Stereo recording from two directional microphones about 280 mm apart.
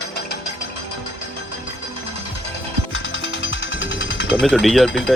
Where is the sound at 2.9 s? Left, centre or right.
Left.